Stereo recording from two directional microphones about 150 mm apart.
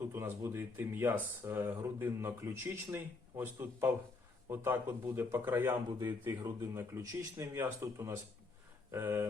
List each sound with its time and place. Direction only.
0.0 s speech: 15° right (ahead or behind)